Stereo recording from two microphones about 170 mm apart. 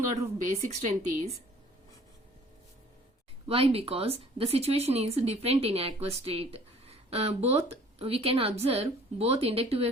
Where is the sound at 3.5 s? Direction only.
35° right (ahead or behind).